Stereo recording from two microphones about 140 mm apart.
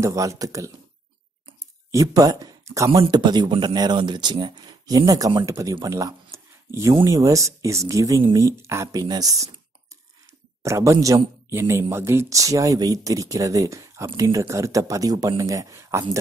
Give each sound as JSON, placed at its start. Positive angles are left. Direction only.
{"t": 0.0, "sound": "speech", "side_deg": -20}
{"t": 1.9, "sound": "speech", "side_deg": -25}
{"t": 10.6, "sound": "speech", "side_deg": -20}